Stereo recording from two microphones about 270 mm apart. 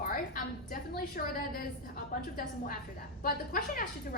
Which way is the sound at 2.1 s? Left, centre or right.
Left.